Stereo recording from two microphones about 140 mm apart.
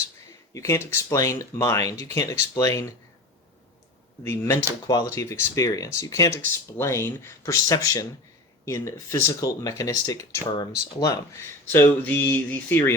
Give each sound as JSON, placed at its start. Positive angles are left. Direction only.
{"t": 0.5, "sound": "speech", "side_deg": 20}
{"t": 4.2, "sound": "speech", "side_deg": 20}